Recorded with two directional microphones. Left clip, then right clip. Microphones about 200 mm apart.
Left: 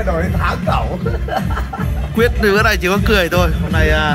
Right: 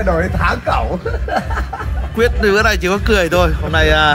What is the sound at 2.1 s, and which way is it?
Speech, 5° right (ahead or behind).